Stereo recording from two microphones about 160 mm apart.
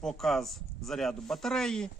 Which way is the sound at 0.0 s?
Centre (ahead or behind).